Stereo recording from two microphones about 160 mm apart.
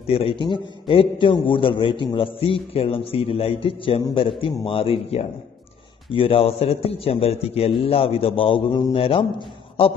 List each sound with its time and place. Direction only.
0.0 s a man's voice: 35° left (ahead or behind)